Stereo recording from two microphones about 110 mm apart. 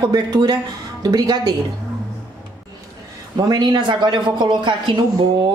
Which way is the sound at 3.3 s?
40° right (ahead or behind).